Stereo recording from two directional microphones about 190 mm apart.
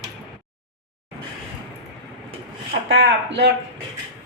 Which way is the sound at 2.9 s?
75° right (ahead or behind).